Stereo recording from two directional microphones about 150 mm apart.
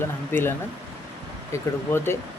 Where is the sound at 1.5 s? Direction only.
15° left (ahead or behind).